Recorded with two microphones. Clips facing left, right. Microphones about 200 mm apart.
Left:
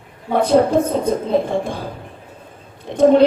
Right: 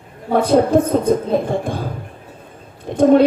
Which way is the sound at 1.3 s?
55° right (ahead or behind).